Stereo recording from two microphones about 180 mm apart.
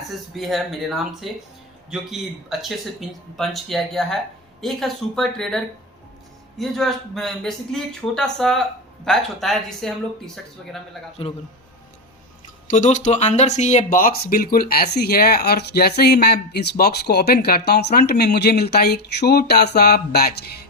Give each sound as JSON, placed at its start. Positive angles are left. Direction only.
{"t": 0.3, "sound": "speech", "side_deg": 0}
{"t": 11.2, "sound": "a man's voice", "side_deg": 30}
{"t": 12.7, "sound": "speech", "side_deg": 45}